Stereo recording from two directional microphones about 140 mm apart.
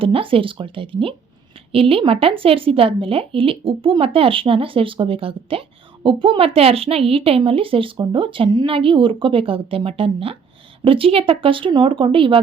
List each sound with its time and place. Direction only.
0.0 s a woman's voice: 40° right (ahead or behind)